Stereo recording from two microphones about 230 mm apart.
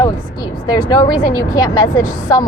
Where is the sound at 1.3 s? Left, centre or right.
Centre.